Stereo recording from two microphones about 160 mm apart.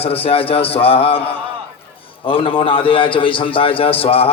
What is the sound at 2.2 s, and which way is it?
A man's voice, 35° left (ahead or behind).